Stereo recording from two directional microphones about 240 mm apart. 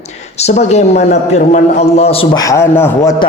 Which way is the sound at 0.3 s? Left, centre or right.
Left.